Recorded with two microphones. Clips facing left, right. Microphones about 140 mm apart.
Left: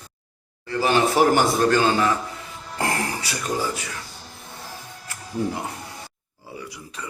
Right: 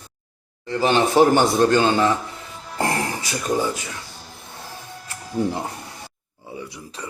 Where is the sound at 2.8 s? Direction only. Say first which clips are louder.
Right 2 dB; 30° right (ahead or behind).